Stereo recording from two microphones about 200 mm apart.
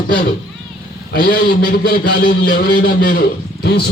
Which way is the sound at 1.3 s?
45° left (ahead or behind).